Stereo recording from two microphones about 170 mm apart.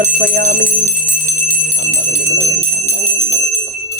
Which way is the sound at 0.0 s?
70° right (ahead or behind).